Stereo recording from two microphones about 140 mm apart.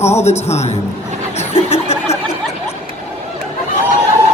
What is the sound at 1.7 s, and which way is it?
Snicker, 50° left (ahead or behind).